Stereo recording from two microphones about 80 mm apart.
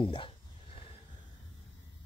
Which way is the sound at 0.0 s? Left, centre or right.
Left.